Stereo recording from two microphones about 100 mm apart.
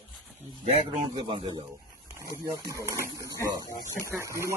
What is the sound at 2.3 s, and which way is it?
Speech, 35° right (ahead or behind).